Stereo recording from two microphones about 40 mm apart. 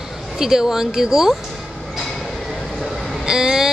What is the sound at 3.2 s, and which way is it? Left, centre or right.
Speech, centre.